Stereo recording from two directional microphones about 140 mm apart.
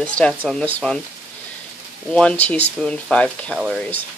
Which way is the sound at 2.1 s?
10° left (ahead or behind).